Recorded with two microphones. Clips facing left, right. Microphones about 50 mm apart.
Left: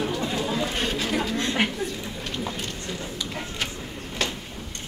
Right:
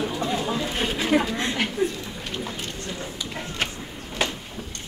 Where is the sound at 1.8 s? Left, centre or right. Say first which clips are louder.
Right 6 dB; right.